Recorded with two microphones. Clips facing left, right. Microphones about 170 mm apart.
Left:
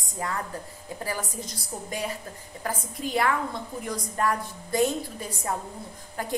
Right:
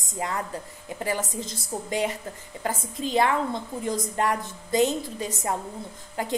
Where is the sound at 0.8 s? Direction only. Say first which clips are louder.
Right 4 dB; 20° right (ahead or behind).